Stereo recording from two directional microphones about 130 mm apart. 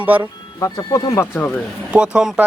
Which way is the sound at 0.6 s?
25° left (ahead or behind).